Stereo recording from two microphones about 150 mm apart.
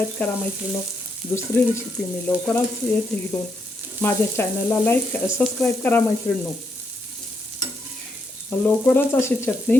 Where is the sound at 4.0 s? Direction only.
15° left (ahead or behind).